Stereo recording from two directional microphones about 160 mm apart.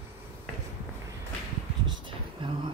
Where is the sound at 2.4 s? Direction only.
30° right (ahead or behind).